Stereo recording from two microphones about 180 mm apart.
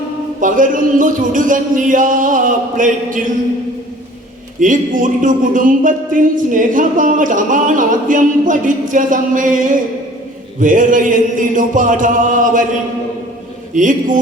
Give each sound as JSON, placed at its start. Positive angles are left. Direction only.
{"t": 0.3, "sound": "speech", "side_deg": -45}
{"t": 4.6, "sound": "speech", "side_deg": -45}
{"t": 13.7, "sound": "speech", "side_deg": -45}